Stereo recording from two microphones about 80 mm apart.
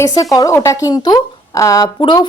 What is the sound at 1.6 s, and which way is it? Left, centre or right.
Speech, left.